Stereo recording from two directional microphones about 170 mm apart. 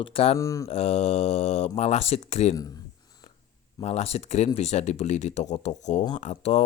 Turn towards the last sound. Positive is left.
turn(degrees=40)  # may be behind; listen again after turning